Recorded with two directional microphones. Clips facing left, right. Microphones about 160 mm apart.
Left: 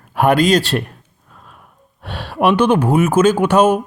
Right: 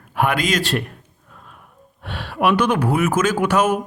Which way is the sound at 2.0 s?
35° left (ahead or behind).